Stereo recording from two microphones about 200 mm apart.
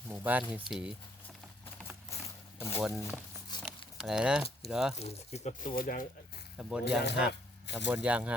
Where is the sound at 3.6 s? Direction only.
5° right (ahead or behind).